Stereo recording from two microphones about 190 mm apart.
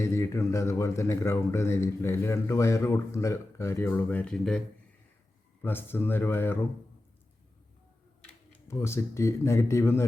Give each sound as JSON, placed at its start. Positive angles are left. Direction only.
{"t": 0.0, "sound": "speech", "side_deg": 15}
{"t": 5.6, "sound": "speech", "side_deg": 10}
{"t": 8.2, "sound": "speech", "side_deg": 15}